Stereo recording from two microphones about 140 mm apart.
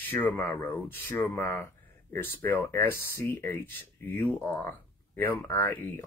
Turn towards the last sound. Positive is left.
turn(degrees=15)  # may be behind; listen again after turning